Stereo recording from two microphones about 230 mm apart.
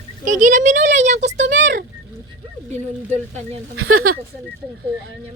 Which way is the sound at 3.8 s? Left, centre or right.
Right.